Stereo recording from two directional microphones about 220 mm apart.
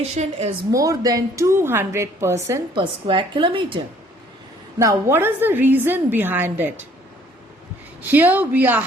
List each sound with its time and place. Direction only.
0.2 s a woman's voice: 30° right (ahead or behind)
0.7 s a woman's voice: 15° right (ahead or behind)
4.8 s a woman's voice: 15° right (ahead or behind)
8.0 s a woman's voice: 10° right (ahead or behind)